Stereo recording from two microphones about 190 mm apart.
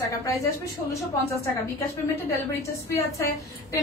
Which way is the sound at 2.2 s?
15° left (ahead or behind).